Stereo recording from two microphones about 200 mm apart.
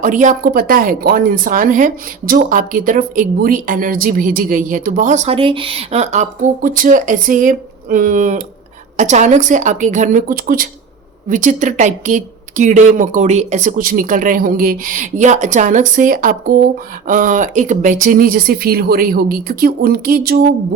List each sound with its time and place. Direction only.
0.0 s speech: 40° right (ahead or behind)